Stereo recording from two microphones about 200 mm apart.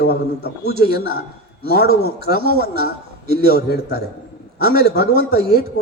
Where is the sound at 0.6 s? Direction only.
50° right (ahead or behind).